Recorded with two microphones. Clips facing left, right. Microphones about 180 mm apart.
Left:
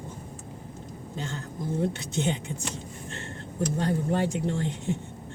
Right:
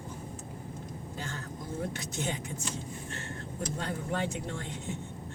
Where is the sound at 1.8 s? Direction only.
25° left (ahead or behind).